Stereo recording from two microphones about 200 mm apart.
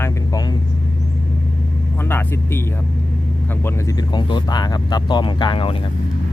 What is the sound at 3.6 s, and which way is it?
Speech, 20° left (ahead or behind).